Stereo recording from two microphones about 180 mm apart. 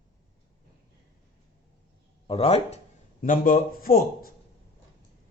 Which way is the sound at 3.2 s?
50° left (ahead or behind).